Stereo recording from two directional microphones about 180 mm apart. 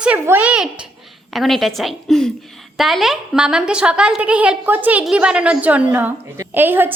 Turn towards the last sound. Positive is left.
turn(degrees=-10)  # may be behind; listen again after turning